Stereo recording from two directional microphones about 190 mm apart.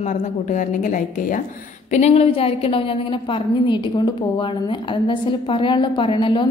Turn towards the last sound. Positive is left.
turn(degrees=25)  # may be behind; listen again after turning